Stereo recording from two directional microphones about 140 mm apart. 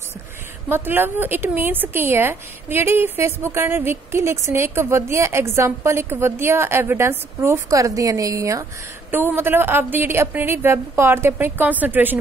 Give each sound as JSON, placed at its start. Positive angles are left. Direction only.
{"t": 0.7, "sound": "a woman's voice", "side_deg": -15}